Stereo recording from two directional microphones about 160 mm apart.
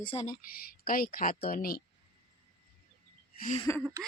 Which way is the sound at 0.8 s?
65° left (ahead or behind).